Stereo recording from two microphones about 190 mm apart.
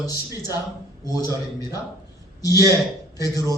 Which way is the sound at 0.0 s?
20° left (ahead or behind).